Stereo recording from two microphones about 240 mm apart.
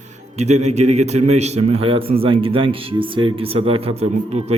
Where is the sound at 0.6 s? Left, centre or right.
Right.